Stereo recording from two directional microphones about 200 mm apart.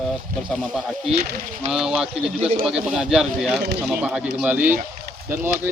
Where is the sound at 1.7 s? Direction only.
5° right (ahead or behind).